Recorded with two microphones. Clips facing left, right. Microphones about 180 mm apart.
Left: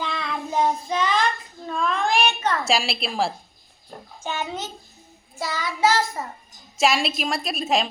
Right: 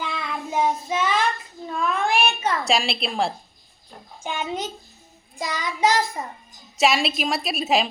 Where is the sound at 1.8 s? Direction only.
10° right (ahead or behind).